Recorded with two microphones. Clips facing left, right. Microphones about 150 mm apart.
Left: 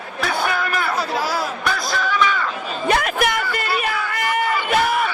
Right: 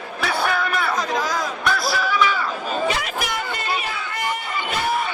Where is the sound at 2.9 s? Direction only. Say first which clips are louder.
Left 6 dB; 55° left (ahead or behind).